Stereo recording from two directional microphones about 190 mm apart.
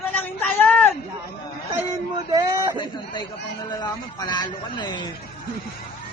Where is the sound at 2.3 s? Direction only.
20° right (ahead or behind).